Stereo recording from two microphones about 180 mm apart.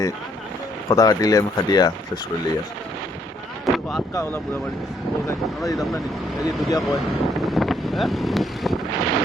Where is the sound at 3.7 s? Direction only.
Centre (ahead or behind).